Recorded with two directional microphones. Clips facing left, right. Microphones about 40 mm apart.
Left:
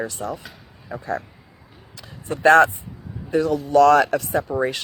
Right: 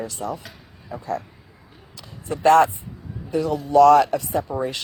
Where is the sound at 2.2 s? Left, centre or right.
Left.